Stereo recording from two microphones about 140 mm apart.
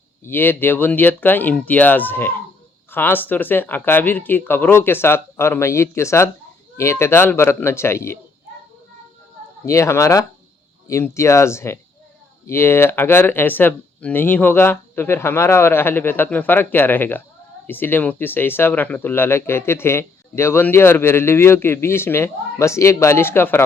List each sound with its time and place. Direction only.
0.3 s speech: 15° left (ahead or behind)
9.6 s speech: 20° left (ahead or behind)